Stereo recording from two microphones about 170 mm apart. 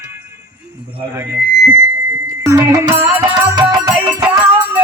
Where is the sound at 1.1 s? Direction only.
15° right (ahead or behind).